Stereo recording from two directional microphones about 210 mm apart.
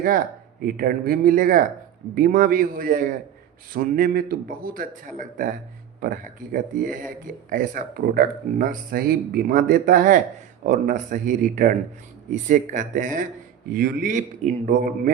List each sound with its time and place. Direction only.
0.6 s a man's voice: 45° right (ahead or behind)
6.0 s a man's voice: 40° right (ahead or behind)